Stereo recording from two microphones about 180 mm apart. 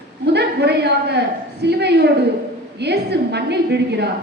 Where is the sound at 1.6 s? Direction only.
65° right (ahead or behind).